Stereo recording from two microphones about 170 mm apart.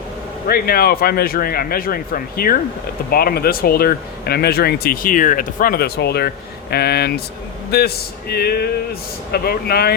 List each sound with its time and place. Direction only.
0.4 s speech: 60° left (ahead or behind)